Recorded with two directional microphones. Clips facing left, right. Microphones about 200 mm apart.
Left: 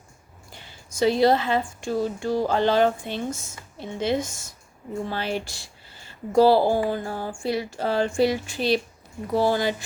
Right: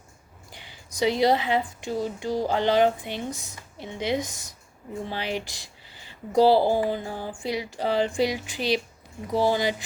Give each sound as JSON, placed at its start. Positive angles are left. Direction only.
{"t": 0.5, "sound": "a woman's voice", "side_deg": -15}